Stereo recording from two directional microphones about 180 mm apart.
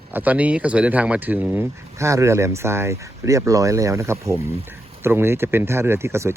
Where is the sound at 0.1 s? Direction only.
10° right (ahead or behind).